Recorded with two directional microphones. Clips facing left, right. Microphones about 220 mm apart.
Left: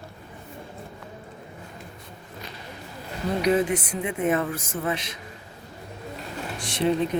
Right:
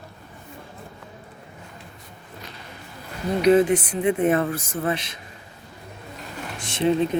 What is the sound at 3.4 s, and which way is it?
Speech, 30° right (ahead or behind).